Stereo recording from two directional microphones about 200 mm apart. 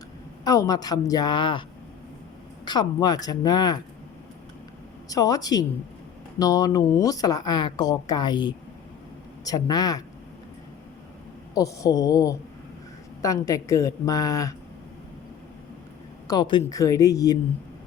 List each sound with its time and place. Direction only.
0.4 s speech: 15° left (ahead or behind)
2.6 s speech: 20° left (ahead or behind)
5.0 s speech: 20° left (ahead or behind)
11.5 s speech: 15° left (ahead or behind)
16.2 s speech: 20° left (ahead or behind)